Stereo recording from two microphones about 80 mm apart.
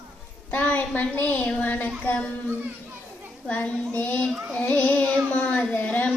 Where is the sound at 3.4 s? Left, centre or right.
Centre.